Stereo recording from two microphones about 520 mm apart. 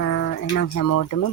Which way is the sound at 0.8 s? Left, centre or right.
Left.